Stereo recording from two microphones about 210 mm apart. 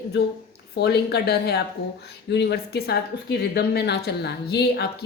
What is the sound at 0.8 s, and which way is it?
Speech, 50° left (ahead or behind).